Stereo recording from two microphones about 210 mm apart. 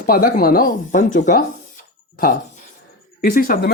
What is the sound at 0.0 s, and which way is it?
Speech, 40° left (ahead or behind).